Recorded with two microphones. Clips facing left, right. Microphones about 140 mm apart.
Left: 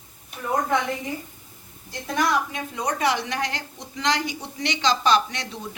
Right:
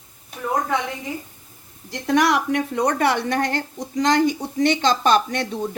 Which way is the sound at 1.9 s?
80° right.